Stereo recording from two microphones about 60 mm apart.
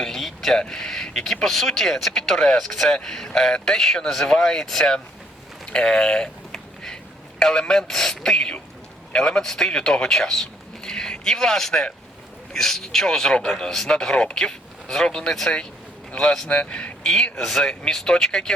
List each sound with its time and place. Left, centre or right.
0.0 s a sound: centre
0.6 s speech: centre
16.5 s speech: centre